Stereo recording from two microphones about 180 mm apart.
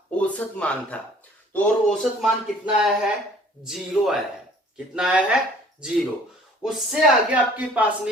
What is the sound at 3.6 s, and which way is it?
A woman's voice, centre (ahead or behind).